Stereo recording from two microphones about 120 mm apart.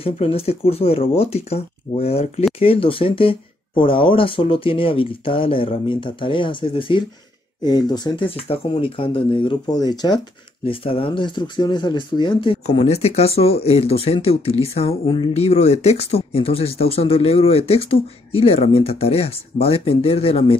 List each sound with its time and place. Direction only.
0.0 s speech: 55° left (ahead or behind)
7.6 s speech: 35° left (ahead or behind)
8.5 s speech: 50° left (ahead or behind)
10.6 s speech: 50° left (ahead or behind)